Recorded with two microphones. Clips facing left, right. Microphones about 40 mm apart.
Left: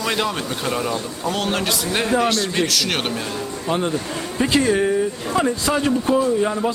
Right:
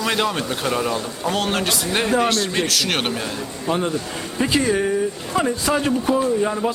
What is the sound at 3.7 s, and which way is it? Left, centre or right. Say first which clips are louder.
A man's voice: even; centre.